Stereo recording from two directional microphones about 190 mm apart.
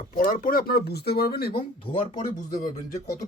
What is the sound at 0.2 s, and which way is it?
Speech, 45° left (ahead or behind).